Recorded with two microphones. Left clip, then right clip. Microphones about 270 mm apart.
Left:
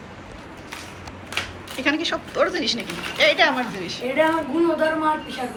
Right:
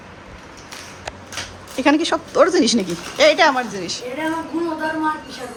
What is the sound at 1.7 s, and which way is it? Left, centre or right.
A woman's voice, centre.